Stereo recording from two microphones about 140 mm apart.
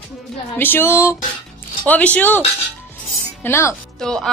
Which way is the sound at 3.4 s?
20° left (ahead or behind).